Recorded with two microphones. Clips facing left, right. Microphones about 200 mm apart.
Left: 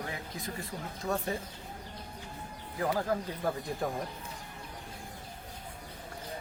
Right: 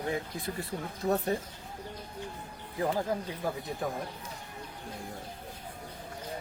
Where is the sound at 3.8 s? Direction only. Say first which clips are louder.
Even; centre (ahead or behind).